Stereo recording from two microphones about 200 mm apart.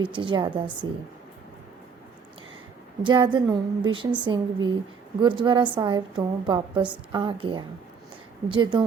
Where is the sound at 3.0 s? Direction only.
25° right (ahead or behind).